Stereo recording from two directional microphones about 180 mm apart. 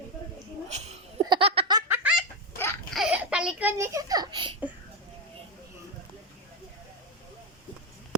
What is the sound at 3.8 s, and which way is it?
Speech, 15° right (ahead or behind).